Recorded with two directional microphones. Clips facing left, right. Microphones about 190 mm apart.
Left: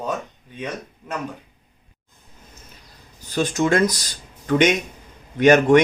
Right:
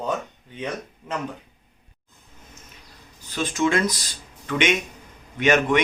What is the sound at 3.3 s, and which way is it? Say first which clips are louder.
Speech: left 3 dB; 45° left (ahead or behind).